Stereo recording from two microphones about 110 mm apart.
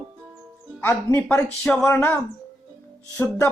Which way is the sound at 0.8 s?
25° left (ahead or behind).